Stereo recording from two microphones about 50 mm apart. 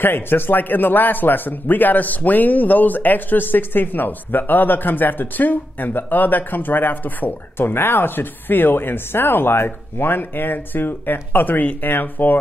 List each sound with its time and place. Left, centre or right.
0.0 s a man's voice: left